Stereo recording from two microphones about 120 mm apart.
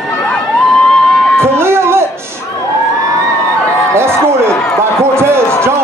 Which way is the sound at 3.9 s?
20° right (ahead or behind).